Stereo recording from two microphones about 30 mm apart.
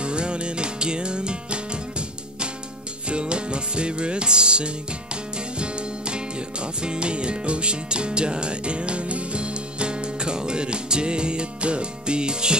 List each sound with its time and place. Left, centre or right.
0.0 s music: right